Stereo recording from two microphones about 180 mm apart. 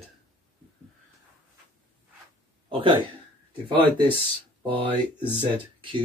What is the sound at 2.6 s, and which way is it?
Speech, 30° right (ahead or behind).